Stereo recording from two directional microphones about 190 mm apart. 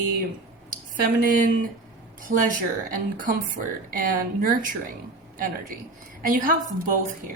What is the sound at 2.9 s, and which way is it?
A woman's voice, 45° right (ahead or behind).